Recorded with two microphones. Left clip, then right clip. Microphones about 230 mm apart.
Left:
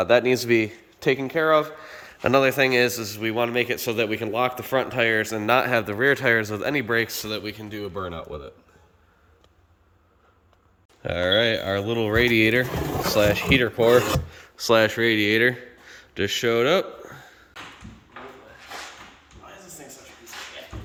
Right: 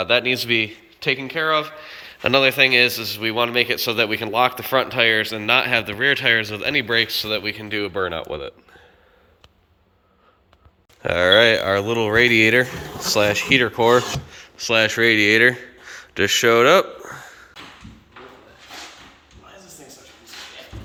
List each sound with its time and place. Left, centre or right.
0.0 s a man's voice: left; by 7.9 s centre
11.0 s speech: centre